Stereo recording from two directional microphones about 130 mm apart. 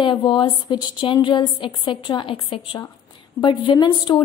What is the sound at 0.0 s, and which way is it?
A woman's voice, 35° left (ahead or behind).